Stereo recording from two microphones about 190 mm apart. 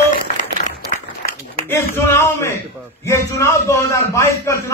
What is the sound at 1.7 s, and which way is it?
A man's voice, 10° left (ahead or behind).